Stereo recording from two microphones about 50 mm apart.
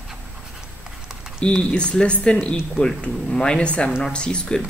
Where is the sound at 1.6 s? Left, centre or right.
Left.